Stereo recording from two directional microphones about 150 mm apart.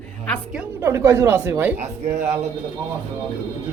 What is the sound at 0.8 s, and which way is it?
Speech, 15° right (ahead or behind).